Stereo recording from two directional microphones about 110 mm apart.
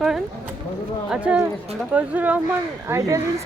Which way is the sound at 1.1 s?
10° right (ahead or behind).